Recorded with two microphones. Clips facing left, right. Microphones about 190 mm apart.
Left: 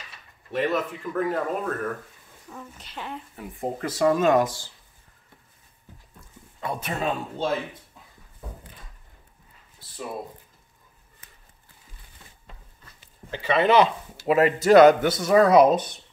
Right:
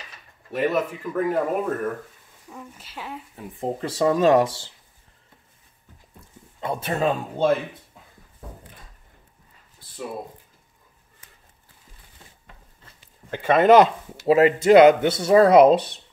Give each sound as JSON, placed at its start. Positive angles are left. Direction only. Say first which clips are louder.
{"t": 0.5, "sound": "speech", "louder": "right 2 dB", "side_deg": -5}
{"t": 3.8, "sound": "speech", "louder": "right 2 dB", "side_deg": -30}
{"t": 6.6, "sound": "speech", "louder": "right 3 dB", "side_deg": -25}
{"t": 6.9, "sound": "speech", "louder": "right 6 dB", "side_deg": -50}
{"t": 13.3, "sound": "speech", "louder": "right 5 dB", "side_deg": -50}
{"t": 14.2, "sound": "speech", "louder": "right 3 dB", "side_deg": -25}